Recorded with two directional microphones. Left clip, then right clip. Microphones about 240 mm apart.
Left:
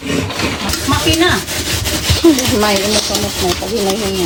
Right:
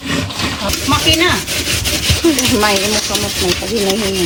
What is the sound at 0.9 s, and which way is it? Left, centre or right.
Speech, centre.